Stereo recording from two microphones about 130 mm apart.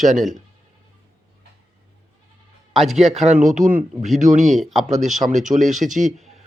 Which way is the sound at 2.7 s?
Centre (ahead or behind).